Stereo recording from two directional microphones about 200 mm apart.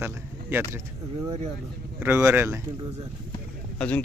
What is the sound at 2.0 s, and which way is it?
Speech, 10° right (ahead or behind).